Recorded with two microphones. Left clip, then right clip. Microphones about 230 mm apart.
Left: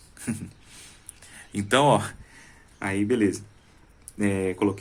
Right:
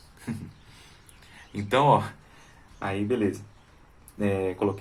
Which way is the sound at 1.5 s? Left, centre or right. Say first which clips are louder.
Left 1 dB; left.